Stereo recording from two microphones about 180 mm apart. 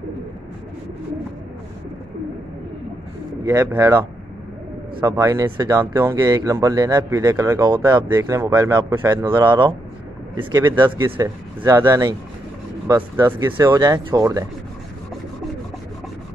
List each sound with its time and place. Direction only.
3.4 s speech: 15° right (ahead or behind)
5.0 s a man's voice: 15° right (ahead or behind)
10.3 s speech: 15° right (ahead or behind)